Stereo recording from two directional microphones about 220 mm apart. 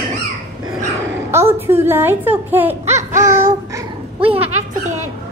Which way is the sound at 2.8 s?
30° right (ahead or behind).